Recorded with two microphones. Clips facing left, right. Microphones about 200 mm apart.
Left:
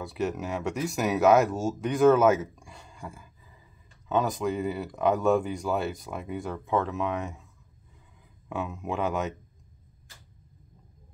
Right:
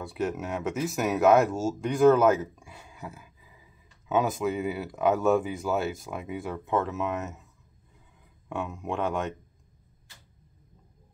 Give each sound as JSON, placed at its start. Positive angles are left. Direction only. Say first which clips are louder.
{"t": 0.0, "sound": "speech", "louder": "even", "side_deg": 0}
{"t": 8.5, "sound": "speech", "louder": "even", "side_deg": 0}